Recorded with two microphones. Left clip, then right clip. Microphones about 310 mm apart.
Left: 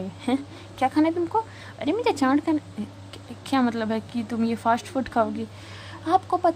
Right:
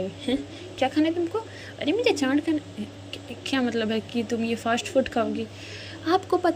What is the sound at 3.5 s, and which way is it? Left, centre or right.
Speech, centre.